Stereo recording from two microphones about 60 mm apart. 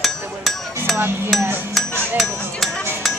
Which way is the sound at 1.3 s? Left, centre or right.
Centre.